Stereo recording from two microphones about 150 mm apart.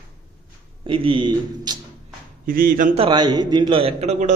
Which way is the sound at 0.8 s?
35° right (ahead or behind).